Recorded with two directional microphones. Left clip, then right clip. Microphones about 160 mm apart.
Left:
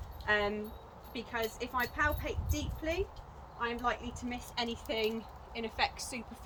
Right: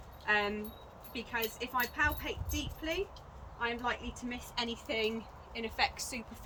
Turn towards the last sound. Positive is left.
turn(degrees=-15)  # may be behind; listen again after turning